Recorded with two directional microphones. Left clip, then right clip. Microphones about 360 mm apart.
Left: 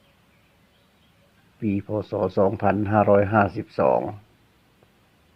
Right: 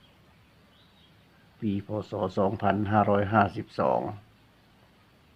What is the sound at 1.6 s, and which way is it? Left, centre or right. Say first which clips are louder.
Speech: left 6 dB; centre.